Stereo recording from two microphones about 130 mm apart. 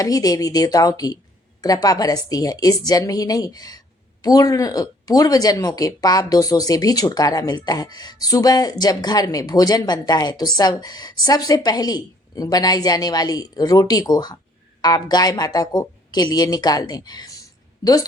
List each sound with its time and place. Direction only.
0.0 s a woman's voice: 30° left (ahead or behind)